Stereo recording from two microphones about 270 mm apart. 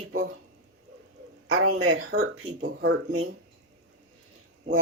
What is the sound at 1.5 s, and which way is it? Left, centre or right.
Speech, right.